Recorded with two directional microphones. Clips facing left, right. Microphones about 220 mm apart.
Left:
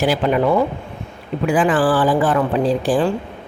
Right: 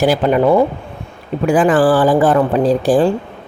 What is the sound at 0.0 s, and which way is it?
Speech, 40° right (ahead or behind).